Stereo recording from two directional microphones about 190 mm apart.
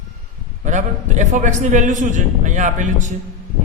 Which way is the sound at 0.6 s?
40° right (ahead or behind).